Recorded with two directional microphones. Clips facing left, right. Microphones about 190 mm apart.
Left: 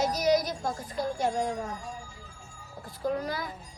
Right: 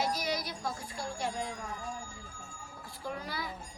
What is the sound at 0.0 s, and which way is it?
Music, 45° left (ahead or behind).